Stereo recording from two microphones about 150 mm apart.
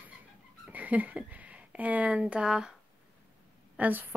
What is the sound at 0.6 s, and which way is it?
Speech, 10° right (ahead or behind).